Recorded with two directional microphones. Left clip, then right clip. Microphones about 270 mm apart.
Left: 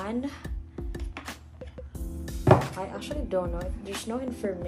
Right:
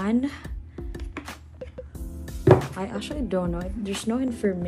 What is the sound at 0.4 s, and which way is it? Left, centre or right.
Music, centre.